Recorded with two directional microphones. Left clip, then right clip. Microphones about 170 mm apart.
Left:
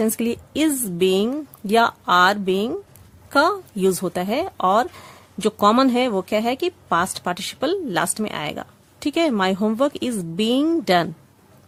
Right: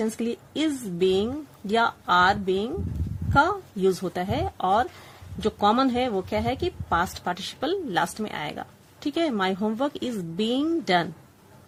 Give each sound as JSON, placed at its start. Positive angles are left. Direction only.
{"t": 0.0, "sound": "speech", "side_deg": 45}